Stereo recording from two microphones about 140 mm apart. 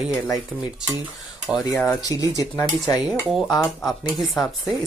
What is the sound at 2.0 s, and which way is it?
Speech, 25° left (ahead or behind).